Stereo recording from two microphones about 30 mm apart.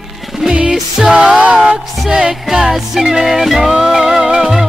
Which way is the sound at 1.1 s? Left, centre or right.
Right.